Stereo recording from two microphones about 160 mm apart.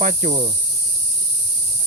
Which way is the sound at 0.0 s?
50° right (ahead or behind).